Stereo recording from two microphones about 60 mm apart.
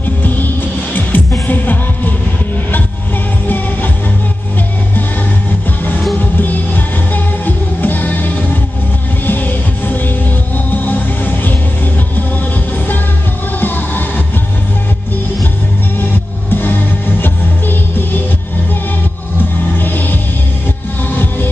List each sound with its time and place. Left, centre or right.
0.2 s music: left
3.4 s music: left
6.1 s music: left
13.6 s music: left
16.0 s music: left
19.8 s music: left